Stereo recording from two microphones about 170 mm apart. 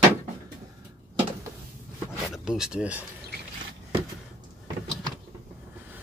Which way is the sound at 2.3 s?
5° right (ahead or behind).